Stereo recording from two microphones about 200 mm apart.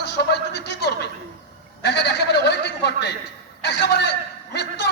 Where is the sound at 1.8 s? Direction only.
60° left (ahead or behind).